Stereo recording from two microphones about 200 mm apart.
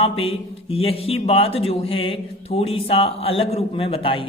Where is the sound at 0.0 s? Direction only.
30° left (ahead or behind).